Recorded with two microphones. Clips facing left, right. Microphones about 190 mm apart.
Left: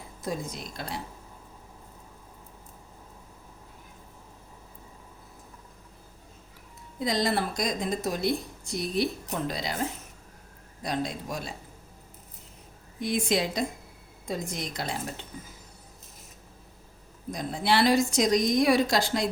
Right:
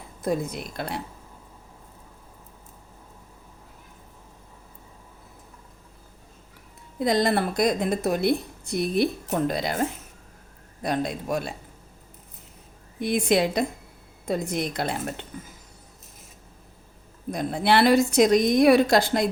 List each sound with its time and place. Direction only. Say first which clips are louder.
0.2 s a woman's voice: right 7 dB; 60° right (ahead or behind)
7.0 s a woman's voice: right 5 dB; 55° right (ahead or behind)
10.8 s a woman's voice: right 5 dB; 60° right (ahead or behind)
13.0 s a woman's voice: right 5 dB; 60° right (ahead or behind)
17.3 s a woman's voice: right 4 dB; 60° right (ahead or behind)